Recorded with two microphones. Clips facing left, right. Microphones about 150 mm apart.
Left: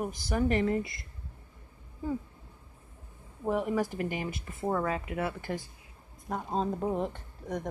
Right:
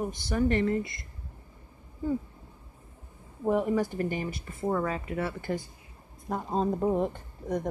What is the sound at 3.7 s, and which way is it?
Speech, centre (ahead or behind).